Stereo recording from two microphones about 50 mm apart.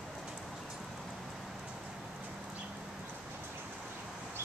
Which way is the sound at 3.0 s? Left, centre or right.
Right.